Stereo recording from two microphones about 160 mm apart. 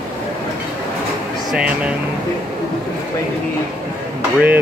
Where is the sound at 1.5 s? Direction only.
5° right (ahead or behind).